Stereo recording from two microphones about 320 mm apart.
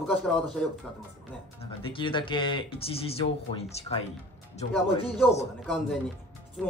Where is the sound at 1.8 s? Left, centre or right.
Centre.